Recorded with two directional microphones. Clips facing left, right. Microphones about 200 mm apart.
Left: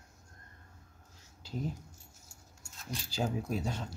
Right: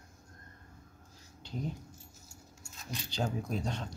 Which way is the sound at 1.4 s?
5° left (ahead or behind).